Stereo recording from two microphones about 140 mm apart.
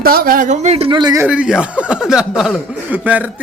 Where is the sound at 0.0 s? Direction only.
90° right; by 1.2 s 30° right (ahead or behind).